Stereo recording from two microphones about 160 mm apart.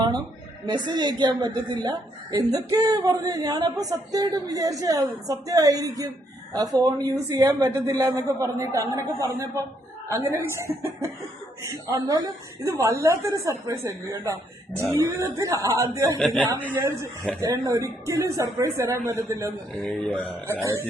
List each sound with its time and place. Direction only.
0.7 s a woman's voice: 30° right (ahead or behind)
16.1 s speech: 5° left (ahead or behind)
16.7 s a woman's voice: 15° right (ahead or behind)
19.9 s speech: 10° left (ahead or behind)